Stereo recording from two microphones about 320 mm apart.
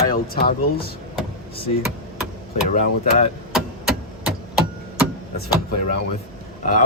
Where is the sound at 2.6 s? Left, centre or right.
Left.